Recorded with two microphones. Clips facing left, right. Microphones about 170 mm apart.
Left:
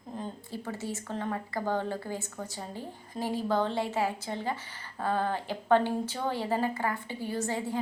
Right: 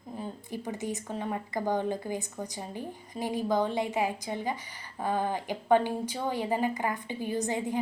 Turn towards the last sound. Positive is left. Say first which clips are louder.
# right 2 dB
turn(degrees=-15)  # may be behind; listen again after turning